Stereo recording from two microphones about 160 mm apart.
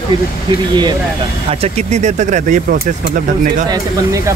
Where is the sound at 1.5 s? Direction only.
40° right (ahead or behind).